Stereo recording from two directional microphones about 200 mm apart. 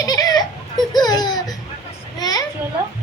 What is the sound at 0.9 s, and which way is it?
Baby laughter, 20° left (ahead or behind).